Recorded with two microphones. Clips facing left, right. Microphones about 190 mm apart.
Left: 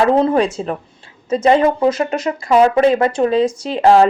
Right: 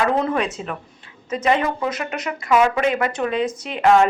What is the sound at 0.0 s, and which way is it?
Speech, 30° left (ahead or behind).